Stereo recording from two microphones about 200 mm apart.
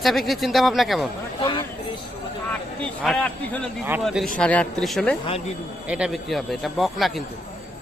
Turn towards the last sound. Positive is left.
turn(degrees=0)  # may be behind; listen again after turning